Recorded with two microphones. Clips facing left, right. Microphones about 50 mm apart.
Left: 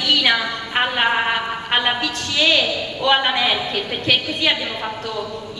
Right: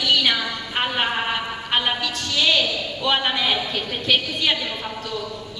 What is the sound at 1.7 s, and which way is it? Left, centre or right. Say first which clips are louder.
A woman's voice: left 2 dB; centre.